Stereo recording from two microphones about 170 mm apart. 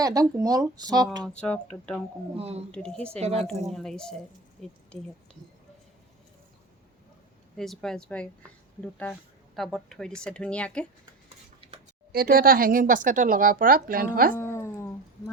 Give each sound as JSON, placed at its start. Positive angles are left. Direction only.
{"t": 0.0, "sound": "speech", "side_deg": -20}
{"t": 1.2, "sound": "speech", "side_deg": 5}
{"t": 2.4, "sound": "speech", "side_deg": -35}
{"t": 2.7, "sound": "speech", "side_deg": 5}
{"t": 3.2, "sound": "speech", "side_deg": -40}
{"t": 3.7, "sound": "speech", "side_deg": 0}
{"t": 7.5, "sound": "speech", "side_deg": 0}
{"t": 12.1, "sound": "speech", "side_deg": -60}
{"t": 14.3, "sound": "dog", "side_deg": 15}